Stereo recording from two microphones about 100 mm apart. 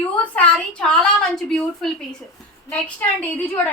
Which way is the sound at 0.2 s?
15° left (ahead or behind).